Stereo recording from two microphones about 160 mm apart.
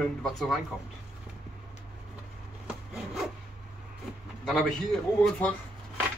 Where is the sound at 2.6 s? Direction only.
5° right (ahead or behind).